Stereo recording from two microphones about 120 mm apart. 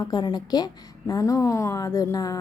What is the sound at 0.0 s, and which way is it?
A woman's voice, 35° left (ahead or behind).